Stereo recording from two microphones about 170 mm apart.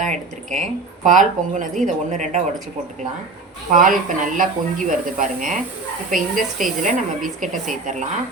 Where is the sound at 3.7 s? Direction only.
50° right (ahead or behind).